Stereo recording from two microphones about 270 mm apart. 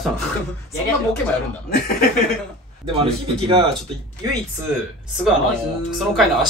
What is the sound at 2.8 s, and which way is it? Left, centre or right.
Speech, centre.